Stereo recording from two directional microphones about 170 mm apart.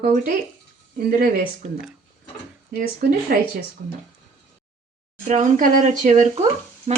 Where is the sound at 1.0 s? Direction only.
60° right (ahead or behind).